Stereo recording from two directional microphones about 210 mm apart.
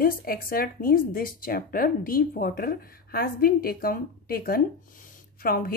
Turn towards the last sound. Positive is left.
turn(degrees=45)  # may be behind; listen again after turning